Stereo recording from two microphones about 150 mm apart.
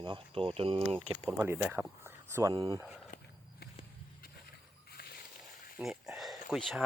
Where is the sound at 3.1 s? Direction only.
70° left (ahead or behind).